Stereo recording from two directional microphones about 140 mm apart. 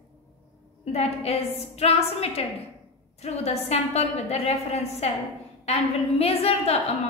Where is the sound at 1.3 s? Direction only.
50° left (ahead or behind).